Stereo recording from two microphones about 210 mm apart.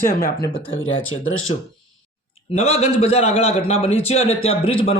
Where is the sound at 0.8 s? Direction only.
70° left (ahead or behind).